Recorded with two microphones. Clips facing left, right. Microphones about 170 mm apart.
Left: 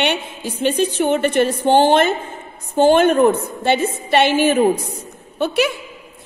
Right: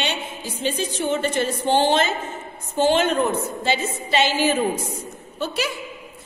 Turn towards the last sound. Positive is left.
turn(degrees=65)  # may be behind; listen again after turning